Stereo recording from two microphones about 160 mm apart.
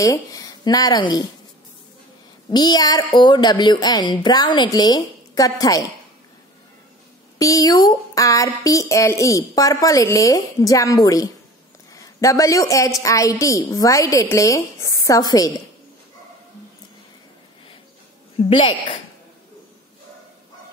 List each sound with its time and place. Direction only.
0.0 s speech: 20° left (ahead or behind)
2.5 s a woman's voice: 25° left (ahead or behind)
7.3 s a woman's voice: 20° left (ahead or behind)
18.5 s speech: 30° left (ahead or behind)